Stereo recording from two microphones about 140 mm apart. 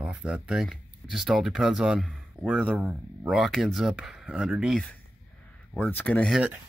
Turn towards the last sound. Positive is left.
turn(degrees=-10)  # may be behind; listen again after turning